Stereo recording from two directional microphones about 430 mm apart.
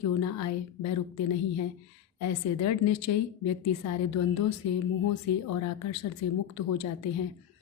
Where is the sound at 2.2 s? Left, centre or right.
Left.